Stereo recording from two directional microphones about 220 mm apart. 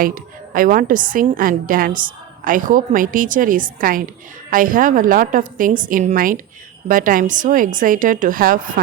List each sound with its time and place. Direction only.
0.0 s a woman's voice: 40° right (ahead or behind)